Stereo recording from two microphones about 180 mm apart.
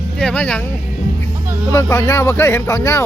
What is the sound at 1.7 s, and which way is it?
Speech, 15° left (ahead or behind).